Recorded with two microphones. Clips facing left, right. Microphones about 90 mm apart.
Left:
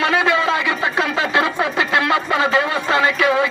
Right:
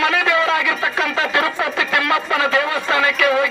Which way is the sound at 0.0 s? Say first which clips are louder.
Left 1 dB; 25° left (ahead or behind).